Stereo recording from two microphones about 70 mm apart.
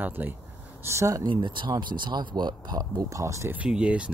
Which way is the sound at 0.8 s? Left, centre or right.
Right.